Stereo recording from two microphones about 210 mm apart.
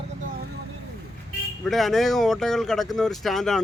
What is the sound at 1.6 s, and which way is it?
Speech, centre (ahead or behind).